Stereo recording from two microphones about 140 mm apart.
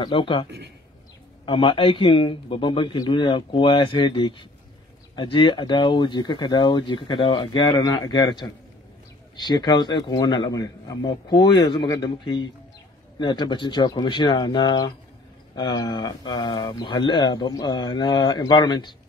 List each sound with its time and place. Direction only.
0.0 s speech: 35° left (ahead or behind)